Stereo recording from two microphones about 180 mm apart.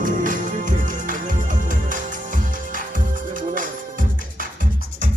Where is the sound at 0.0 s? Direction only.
45° right (ahead or behind).